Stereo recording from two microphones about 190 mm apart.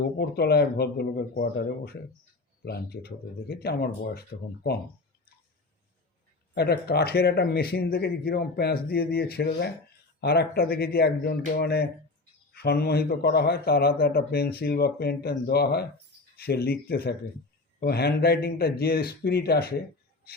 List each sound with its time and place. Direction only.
0.2 s a man's voice: 55° left (ahead or behind)
6.5 s a man's voice: 60° left (ahead or behind)